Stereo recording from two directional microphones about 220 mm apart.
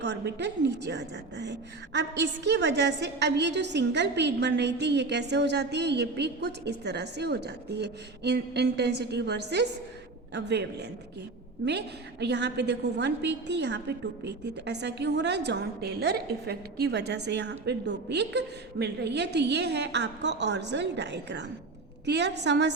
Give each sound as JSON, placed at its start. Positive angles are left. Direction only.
{"t": 0.0, "sound": "a woman's voice", "side_deg": -50}
{"t": 12.2, "sound": "a woman's voice", "side_deg": -50}